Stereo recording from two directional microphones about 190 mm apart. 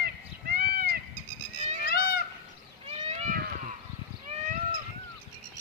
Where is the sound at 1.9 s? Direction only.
50° left (ahead or behind).